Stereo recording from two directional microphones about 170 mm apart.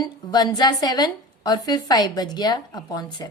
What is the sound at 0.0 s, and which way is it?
A woman's voice, 25° left (ahead or behind).